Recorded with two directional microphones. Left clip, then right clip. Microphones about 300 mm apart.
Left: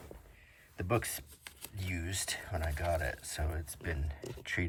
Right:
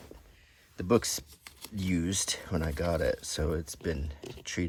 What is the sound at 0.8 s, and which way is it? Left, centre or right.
Speech, centre.